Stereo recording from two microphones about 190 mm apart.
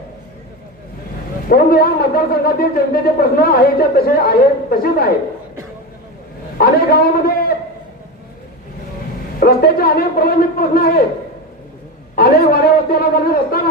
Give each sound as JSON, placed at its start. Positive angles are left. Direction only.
{"t": 1.5, "sound": "a man's voice", "side_deg": 50}
{"t": 6.6, "sound": "a man's voice", "side_deg": 55}
{"t": 9.4, "sound": "a man's voice", "side_deg": 55}
{"t": 12.1, "sound": "a man's voice", "side_deg": 55}